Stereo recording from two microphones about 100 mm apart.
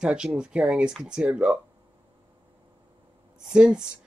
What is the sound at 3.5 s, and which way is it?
Speech, 5° right (ahead or behind).